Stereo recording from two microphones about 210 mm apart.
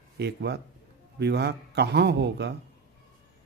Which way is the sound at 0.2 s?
50° right (ahead or behind).